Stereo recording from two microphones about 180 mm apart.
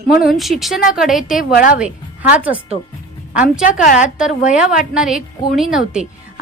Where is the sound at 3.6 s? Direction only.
45° left (ahead or behind).